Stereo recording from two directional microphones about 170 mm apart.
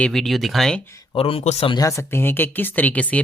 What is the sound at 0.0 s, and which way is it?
Speech, centre (ahead or behind).